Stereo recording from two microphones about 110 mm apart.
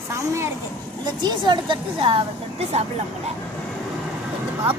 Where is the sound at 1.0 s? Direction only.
40° right (ahead or behind); by 2.9 s 70° right (ahead or behind).